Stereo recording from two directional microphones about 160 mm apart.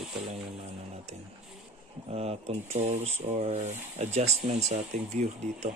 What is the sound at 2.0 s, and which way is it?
Speech, 40° right (ahead or behind).